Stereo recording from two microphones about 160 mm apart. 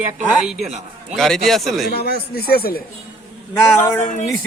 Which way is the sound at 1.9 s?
80° left.